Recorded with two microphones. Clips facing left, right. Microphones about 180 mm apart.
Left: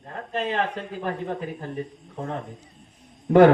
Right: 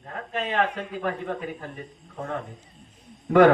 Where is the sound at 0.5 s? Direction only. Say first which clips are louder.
Right 1 dB; 30° left (ahead or behind).